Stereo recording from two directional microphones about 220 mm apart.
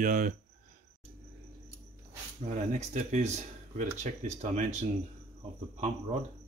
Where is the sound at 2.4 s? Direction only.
35° right (ahead or behind).